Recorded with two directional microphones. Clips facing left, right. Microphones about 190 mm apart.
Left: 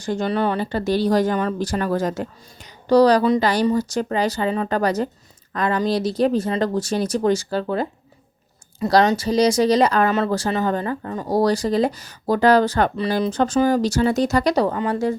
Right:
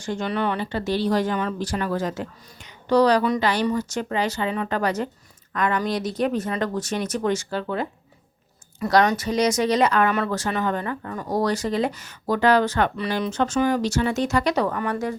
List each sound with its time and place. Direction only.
0.0 s speech: 40° left (ahead or behind)